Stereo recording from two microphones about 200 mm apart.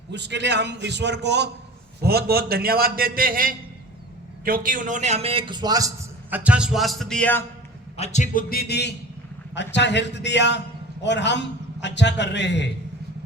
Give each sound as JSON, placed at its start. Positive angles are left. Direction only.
{"t": 0.1, "sound": "a man's voice", "side_deg": -60}
{"t": 7.9, "sound": "a man's voice", "side_deg": 35}